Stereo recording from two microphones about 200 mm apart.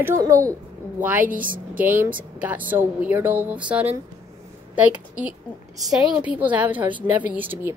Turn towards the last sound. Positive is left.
turn(degrees=-10)  # may be behind; listen again after turning